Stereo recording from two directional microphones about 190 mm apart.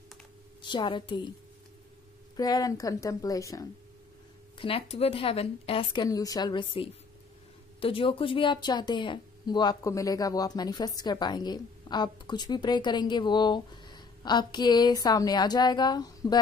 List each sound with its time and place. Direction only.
0.6 s a woman's voice: 25° left (ahead or behind)
2.3 s a woman's voice: 20° left (ahead or behind)
4.6 s a woman's voice: 30° left (ahead or behind)